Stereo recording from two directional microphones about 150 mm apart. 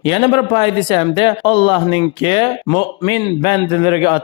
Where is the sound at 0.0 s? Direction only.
35° left (ahead or behind).